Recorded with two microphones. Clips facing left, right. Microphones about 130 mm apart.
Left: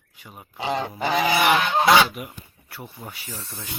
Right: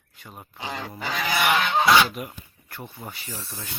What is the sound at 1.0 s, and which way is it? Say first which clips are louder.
Goose: left 7 dB; 25° left (ahead or behind).